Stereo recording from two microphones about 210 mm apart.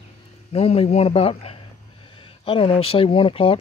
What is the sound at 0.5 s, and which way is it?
Speech, 30° left (ahead or behind).